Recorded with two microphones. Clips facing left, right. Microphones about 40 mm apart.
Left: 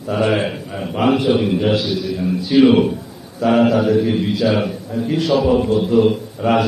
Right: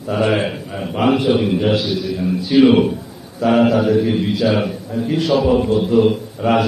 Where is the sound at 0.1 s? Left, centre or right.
Centre.